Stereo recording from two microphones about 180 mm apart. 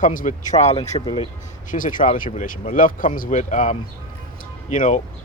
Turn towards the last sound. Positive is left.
turn(degrees=45)  # may be behind; listen again after turning